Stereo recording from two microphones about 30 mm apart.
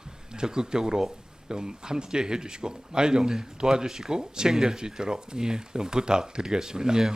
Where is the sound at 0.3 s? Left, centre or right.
Right.